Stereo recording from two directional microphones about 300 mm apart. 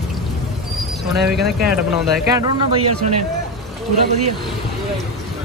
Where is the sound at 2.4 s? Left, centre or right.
Centre.